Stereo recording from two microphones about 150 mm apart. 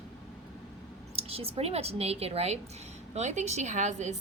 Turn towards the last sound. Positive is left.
turn(degrees=-50)  # may be behind; listen again after turning